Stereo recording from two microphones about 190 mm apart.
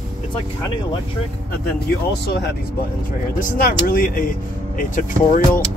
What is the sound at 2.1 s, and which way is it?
Speech, 60° left (ahead or behind).